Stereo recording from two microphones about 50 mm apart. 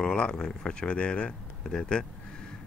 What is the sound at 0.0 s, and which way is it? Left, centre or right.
Speech, centre.